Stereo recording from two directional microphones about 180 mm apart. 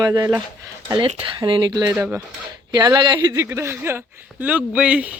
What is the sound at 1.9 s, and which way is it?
Speech, 5° right (ahead or behind).